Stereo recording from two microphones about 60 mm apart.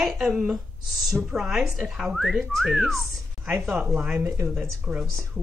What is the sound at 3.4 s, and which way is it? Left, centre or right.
Speech, centre.